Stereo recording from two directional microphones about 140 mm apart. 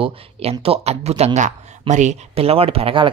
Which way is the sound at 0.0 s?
45° right (ahead or behind).